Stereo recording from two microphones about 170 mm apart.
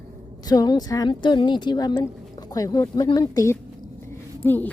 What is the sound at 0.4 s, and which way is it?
Speech, 25° left (ahead or behind).